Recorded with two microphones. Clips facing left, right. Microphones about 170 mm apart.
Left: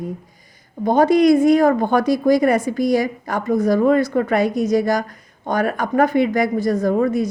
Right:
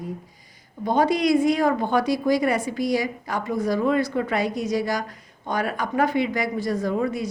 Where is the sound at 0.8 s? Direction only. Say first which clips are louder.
Left 7 dB; 50° left (ahead or behind).